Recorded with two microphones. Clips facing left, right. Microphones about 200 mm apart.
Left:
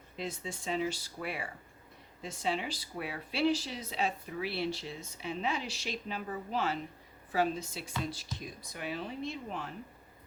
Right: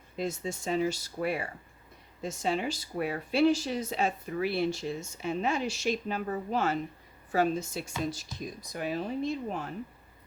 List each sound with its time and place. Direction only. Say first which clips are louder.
0.2 s speech: right 6 dB; 45° right (ahead or behind)